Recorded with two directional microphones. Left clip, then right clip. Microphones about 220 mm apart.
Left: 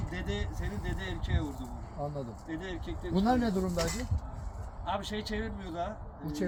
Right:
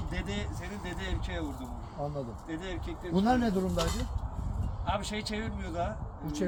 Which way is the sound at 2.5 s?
15° right (ahead or behind).